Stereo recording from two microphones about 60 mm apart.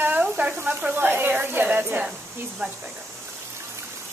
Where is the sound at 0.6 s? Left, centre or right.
Right.